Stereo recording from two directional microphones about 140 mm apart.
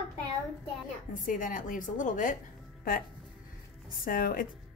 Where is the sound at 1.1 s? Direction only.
70° left (ahead or behind).